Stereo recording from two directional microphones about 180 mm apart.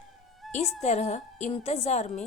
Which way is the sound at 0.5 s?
40° left (ahead or behind).